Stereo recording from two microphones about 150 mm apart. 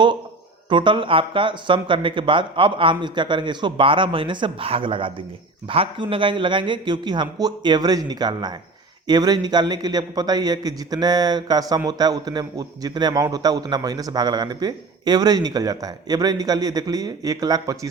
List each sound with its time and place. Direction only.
0.7 s a man's voice: 35° right (ahead or behind)